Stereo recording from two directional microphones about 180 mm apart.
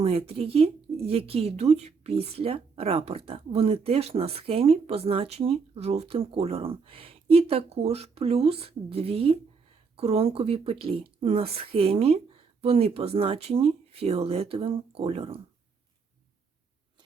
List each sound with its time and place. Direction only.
0.0 s speech: 35° right (ahead or behind)